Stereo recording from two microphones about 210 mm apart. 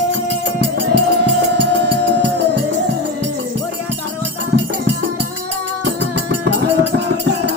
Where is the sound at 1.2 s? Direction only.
55° right (ahead or behind).